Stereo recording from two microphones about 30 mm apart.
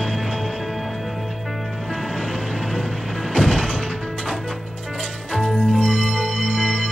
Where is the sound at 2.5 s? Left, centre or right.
Centre.